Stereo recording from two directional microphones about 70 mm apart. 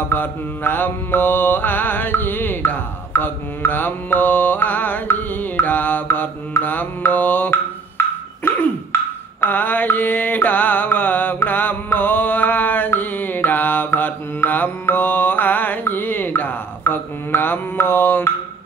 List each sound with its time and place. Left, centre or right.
0.1 s mantra: left
9.4 s mantra: left